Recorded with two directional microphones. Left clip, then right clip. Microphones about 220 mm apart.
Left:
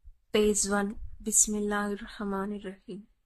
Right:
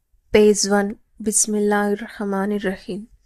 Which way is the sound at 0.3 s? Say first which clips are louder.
Right 11 dB; 20° right (ahead or behind).